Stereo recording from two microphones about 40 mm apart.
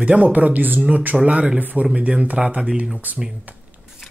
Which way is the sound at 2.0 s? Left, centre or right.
Right.